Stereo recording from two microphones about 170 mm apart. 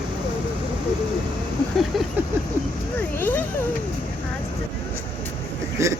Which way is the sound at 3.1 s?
10° left (ahead or behind).